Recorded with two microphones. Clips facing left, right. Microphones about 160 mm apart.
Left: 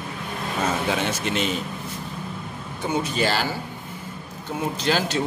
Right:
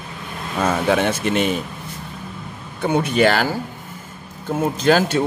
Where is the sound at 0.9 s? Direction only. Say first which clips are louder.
Right 6 dB; 55° right (ahead or behind).